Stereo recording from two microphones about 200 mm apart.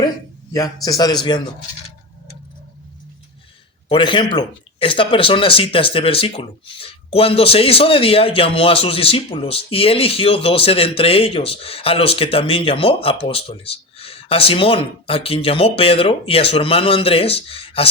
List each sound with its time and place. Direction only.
0.9 s speech: 20° left (ahead or behind)
3.8 s speech: 25° left (ahead or behind)